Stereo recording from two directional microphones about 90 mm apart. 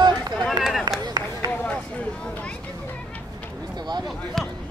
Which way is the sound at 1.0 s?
50° right (ahead or behind).